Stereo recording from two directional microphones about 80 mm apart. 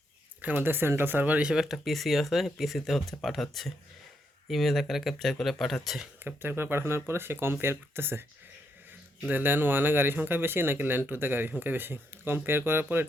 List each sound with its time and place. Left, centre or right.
0.4 s speech: right; by 6.1 s centre
6.2 s speech: right
9.3 s speech: right